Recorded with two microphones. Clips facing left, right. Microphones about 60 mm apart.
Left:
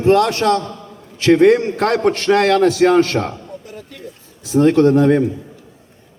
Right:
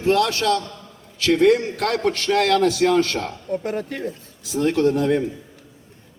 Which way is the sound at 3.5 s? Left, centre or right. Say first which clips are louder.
Right 9 dB; right.